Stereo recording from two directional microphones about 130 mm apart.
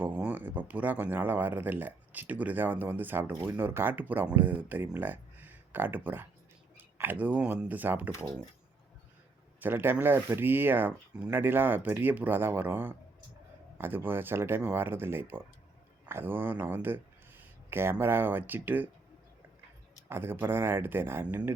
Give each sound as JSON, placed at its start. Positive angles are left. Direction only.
{"t": 0.0, "sound": "speech", "side_deg": -15}
{"t": 9.6, "sound": "speech", "side_deg": -15}
{"t": 20.1, "sound": "speech", "side_deg": -15}